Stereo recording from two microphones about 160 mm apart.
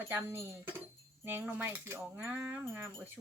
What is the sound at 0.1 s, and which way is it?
Speech, 15° right (ahead or behind).